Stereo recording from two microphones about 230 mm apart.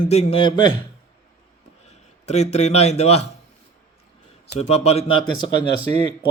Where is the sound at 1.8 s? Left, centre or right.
Left.